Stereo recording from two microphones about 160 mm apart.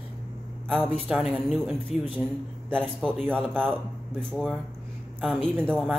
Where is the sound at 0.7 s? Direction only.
Centre (ahead or behind).